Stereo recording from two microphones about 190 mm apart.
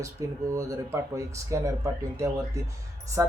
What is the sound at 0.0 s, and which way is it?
Speech, 15° right (ahead or behind).